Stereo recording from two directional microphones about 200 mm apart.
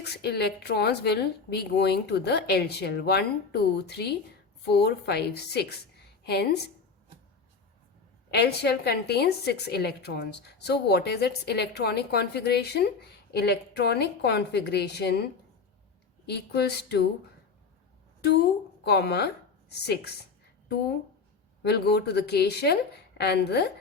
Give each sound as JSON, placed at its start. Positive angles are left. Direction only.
{"t": 0.0, "sound": "a woman's voice", "side_deg": 55}
{"t": 8.3, "sound": "a woman's voice", "side_deg": 55}
{"t": 16.3, "sound": "a woman's voice", "side_deg": 55}
{"t": 18.9, "sound": "a woman's voice", "side_deg": 55}
{"t": 21.6, "sound": "a woman's voice", "side_deg": 55}